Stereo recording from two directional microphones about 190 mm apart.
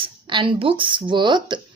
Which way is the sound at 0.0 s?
25° right (ahead or behind).